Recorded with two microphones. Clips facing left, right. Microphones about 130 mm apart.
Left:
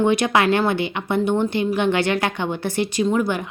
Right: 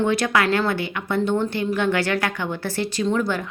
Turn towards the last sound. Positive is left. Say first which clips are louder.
# left 2 dB
turn(degrees=15)  # may be behind; listen again after turning